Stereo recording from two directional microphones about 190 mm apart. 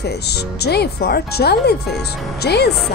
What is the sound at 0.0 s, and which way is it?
Speech, 60° left (ahead or behind).